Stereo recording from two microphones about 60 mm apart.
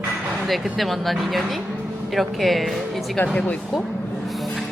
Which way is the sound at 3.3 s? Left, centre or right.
Centre.